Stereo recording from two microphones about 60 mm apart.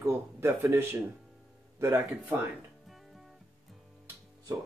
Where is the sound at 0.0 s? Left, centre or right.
Right.